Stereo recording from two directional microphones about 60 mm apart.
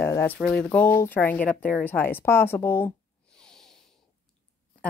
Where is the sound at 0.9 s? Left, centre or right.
Left.